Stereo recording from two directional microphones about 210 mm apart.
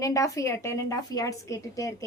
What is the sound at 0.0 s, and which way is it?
A woman's voice, 15° left (ahead or behind).